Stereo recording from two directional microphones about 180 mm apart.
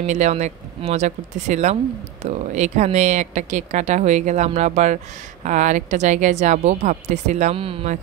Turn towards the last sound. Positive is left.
turn(degrees=-35)  # may be behind; listen again after turning